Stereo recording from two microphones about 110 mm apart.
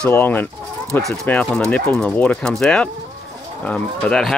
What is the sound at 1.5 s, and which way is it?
Speech, 10° left (ahead or behind).